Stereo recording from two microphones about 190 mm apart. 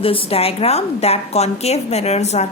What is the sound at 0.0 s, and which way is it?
A woman's voice, 30° left (ahead or behind).